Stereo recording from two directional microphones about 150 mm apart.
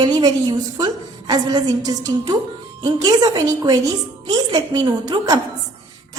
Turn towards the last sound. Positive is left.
turn(degrees=-25)  # may be behind; listen again after turning